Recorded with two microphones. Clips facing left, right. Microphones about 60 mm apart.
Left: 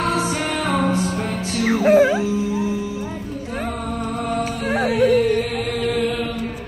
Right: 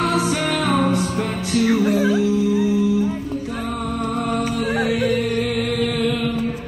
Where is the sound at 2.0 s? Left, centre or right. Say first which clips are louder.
Left 3 dB; left.